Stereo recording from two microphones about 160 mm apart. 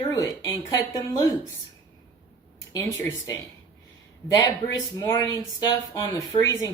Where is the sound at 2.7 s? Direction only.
20° left (ahead or behind).